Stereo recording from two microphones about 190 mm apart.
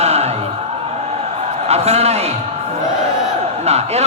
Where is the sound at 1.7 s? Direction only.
35° right (ahead or behind).